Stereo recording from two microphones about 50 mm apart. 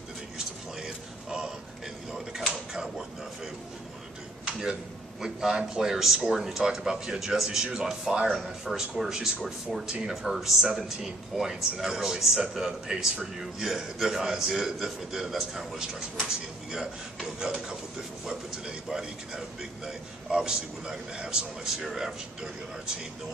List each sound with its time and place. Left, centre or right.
0.7 s a sound: centre
4.5 s tick-tock: centre
5.2 s a man's voice: centre
21.6 s a man's voice: centre